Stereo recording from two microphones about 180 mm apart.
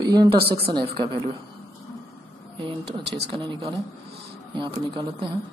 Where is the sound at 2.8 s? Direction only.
70° right (ahead or behind).